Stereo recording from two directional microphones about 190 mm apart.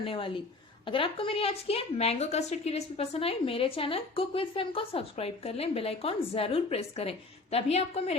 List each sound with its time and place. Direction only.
0.0 s a woman's voice: 30° left (ahead or behind)